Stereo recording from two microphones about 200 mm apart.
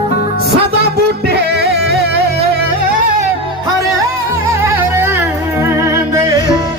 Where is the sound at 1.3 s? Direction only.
55° right (ahead or behind).